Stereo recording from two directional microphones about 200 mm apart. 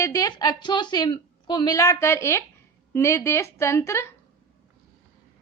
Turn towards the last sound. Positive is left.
turn(degrees=15)  # may be behind; listen again after turning